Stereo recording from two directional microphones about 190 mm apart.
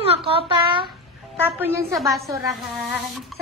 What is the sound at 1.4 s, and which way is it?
Speech, 10° right (ahead or behind).